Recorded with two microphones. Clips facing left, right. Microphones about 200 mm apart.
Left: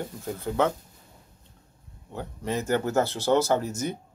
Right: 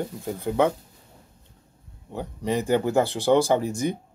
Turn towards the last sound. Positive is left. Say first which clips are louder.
# right 3 dB
turn(degrees=-15)  # may be behind; listen again after turning